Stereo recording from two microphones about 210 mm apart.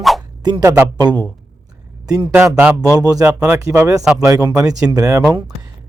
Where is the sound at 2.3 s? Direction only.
10° right (ahead or behind).